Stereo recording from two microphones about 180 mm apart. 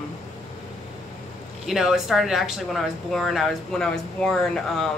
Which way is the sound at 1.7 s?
Centre (ahead or behind).